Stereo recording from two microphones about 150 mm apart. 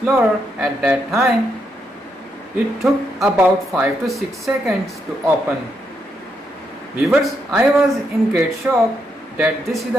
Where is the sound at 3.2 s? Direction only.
Centre (ahead or behind).